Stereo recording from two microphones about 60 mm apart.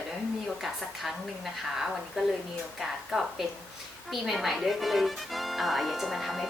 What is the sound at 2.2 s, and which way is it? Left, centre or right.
Speech, centre.